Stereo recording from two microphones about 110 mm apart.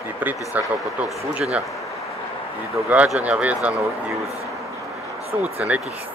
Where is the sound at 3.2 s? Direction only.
10° right (ahead or behind).